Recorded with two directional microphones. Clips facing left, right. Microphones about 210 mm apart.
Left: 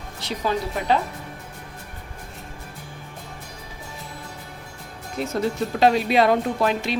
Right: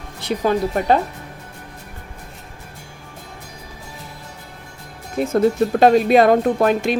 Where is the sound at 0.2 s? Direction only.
55° right (ahead or behind).